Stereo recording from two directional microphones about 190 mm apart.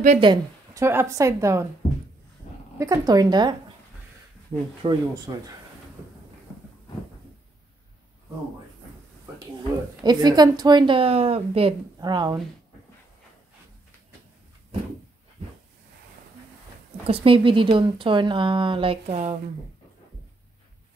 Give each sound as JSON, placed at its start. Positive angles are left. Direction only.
{"t": 0.0, "sound": "a woman's voice", "side_deg": -35}
{"t": 0.3, "sound": "a woman's voice", "side_deg": -15}
{"t": 2.8, "sound": "a woman's voice", "side_deg": -20}
{"t": 4.8, "sound": "a woman's voice", "side_deg": -20}
{"t": 10.0, "sound": "a woman's voice", "side_deg": -20}
{"t": 17.0, "sound": "a woman's voice", "side_deg": -30}